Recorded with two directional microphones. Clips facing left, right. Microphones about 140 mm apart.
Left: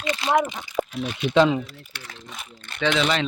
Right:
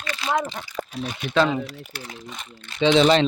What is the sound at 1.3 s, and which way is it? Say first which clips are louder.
Speech: left 3 dB; 15° left (ahead or behind).